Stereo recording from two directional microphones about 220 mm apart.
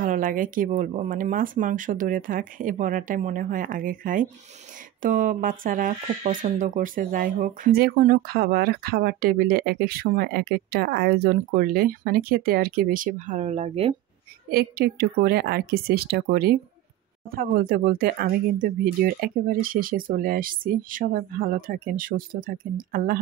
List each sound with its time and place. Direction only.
0.0 s speech: 40° right (ahead or behind)
14.5 s speech: 45° right (ahead or behind)